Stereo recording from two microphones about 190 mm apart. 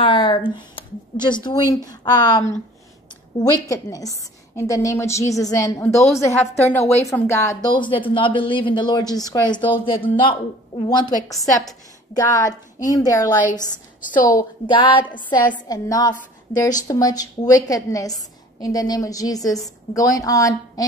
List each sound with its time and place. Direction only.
0.0 s a woman's voice: 25° left (ahead or behind)
13.5 s a woman's voice: 45° left (ahead or behind)
14.7 s speech: 25° left (ahead or behind)